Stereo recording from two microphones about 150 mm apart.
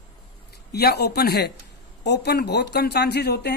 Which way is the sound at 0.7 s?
90° left.